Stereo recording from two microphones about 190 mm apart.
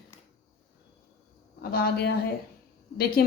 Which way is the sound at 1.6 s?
55° left (ahead or behind).